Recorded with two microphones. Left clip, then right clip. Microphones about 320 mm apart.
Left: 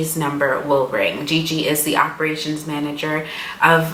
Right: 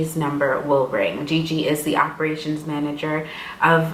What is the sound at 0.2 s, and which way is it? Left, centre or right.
Speech, centre.